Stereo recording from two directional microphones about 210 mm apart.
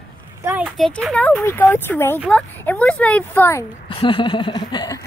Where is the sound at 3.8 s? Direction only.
25° left (ahead or behind).